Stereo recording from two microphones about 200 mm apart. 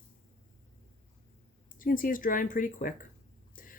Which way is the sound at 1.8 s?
45° left (ahead or behind).